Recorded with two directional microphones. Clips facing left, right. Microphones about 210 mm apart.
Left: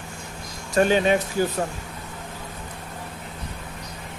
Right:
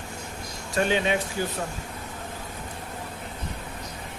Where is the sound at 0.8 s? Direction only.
45° left (ahead or behind).